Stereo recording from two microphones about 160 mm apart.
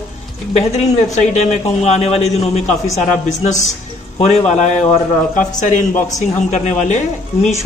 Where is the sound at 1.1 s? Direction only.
45° left (ahead or behind).